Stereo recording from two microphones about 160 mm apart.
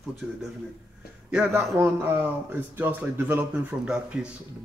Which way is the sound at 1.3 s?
15° right (ahead or behind).